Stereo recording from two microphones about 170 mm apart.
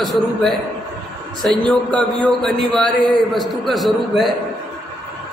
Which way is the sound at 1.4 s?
Centre (ahead or behind).